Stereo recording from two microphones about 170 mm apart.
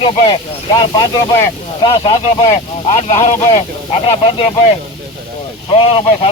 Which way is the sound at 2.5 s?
40° left (ahead or behind).